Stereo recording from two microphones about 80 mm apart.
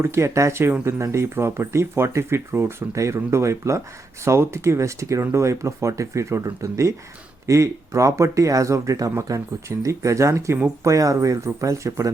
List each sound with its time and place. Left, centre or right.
0.0 s speech: right